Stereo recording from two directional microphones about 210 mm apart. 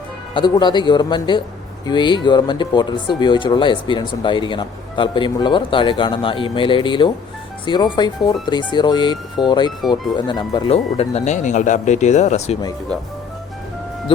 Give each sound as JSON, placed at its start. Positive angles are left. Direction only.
{"t": 0.3, "sound": "speech", "side_deg": 20}